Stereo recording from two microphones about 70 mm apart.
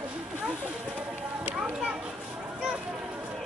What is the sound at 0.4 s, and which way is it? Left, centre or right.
Children playing, centre.